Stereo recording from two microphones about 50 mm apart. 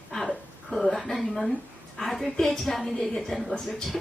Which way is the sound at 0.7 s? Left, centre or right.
Centre.